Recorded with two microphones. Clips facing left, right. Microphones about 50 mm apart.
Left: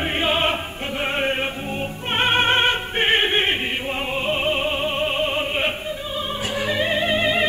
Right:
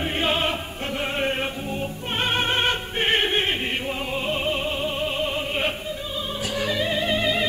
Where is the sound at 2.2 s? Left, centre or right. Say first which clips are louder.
Left 5 dB; left.